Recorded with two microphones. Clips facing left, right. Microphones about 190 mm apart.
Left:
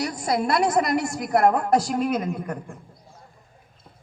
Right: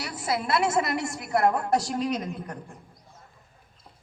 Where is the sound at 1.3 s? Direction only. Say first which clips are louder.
Left 4 dB; 55° left (ahead or behind).